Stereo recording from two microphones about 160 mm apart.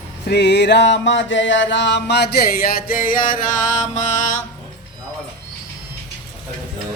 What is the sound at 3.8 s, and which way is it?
Mantra, 50° left (ahead or behind).